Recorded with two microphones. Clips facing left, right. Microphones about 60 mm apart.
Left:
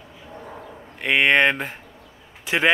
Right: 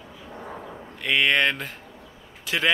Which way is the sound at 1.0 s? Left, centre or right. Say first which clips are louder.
Left 4 dB; left.